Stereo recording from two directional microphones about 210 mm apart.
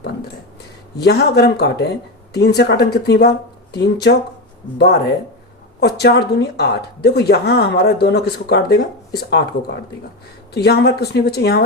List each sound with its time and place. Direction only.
1.0 s a woman's voice: 50° left (ahead or behind)
5.8 s a woman's voice: 50° left (ahead or behind)